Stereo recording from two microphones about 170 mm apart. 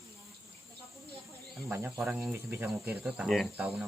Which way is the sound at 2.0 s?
5° right (ahead or behind).